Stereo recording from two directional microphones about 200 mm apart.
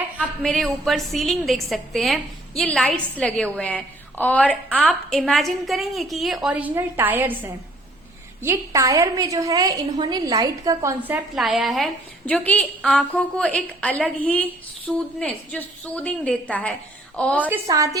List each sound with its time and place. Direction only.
0.2 s a woman's voice: centre (ahead or behind)
17.5 s a woman's voice: 15° right (ahead or behind)